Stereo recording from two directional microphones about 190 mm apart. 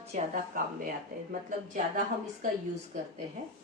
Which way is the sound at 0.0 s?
40° right (ahead or behind).